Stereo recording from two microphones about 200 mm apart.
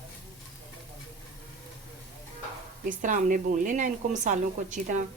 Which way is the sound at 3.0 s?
40° right (ahead or behind).